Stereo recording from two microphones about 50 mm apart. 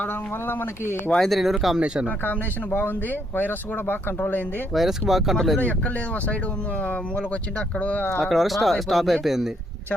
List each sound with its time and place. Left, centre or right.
0.4 s speech: left
1.2 s speech: centre
2.0 s speech: left
4.7 s speech: centre
7.8 s speech: left
8.2 s speech: centre